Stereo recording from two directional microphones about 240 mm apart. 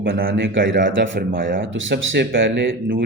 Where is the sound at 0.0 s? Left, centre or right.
Right.